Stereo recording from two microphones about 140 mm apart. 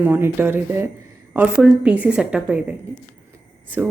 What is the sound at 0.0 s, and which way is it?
A woman's voice, 15° right (ahead or behind).